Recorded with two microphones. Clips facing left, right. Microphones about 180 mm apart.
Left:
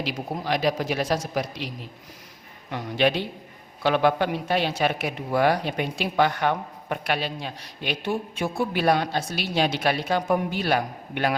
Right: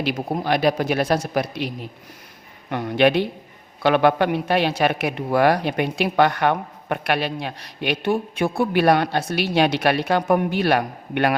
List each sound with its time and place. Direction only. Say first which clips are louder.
0.0 s speech: right 6 dB; 60° right (ahead or behind)